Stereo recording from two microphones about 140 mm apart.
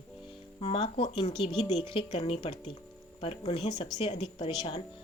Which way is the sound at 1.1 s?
30° left (ahead or behind).